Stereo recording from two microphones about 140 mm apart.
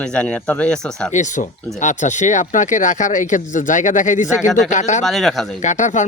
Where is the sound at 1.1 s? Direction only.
60° left (ahead or behind).